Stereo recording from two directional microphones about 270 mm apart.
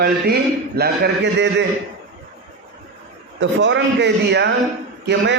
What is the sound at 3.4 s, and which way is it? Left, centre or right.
A man's voice, right.